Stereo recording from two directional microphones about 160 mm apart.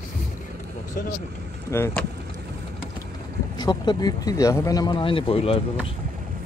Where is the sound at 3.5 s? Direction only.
25° left (ahead or behind).